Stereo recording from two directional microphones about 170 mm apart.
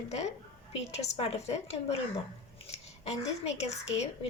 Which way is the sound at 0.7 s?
40° left (ahead or behind).